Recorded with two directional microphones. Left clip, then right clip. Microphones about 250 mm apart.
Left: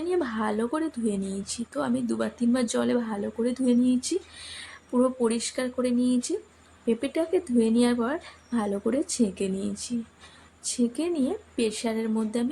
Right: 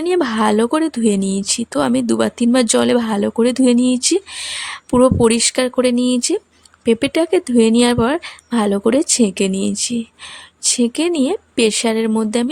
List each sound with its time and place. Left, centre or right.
0.0 s speech: right